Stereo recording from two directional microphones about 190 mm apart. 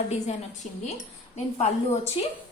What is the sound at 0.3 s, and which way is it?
A woman's voice, 35° left (ahead or behind).